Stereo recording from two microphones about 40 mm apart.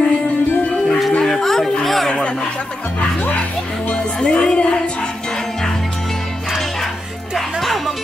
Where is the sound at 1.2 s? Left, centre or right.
Centre.